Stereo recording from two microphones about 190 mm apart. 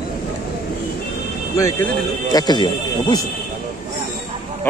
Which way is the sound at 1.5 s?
15° left (ahead or behind).